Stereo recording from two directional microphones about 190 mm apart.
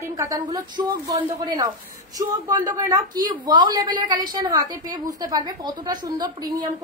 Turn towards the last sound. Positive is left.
turn(degrees=-20)  # may be behind; listen again after turning